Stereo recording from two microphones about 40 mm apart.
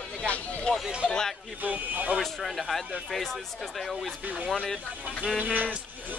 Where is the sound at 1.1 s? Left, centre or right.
Centre.